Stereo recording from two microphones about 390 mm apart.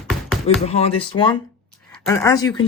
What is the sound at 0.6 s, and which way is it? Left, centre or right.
Speech, centre.